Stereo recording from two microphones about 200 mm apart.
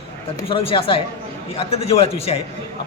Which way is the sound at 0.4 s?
25° left (ahead or behind).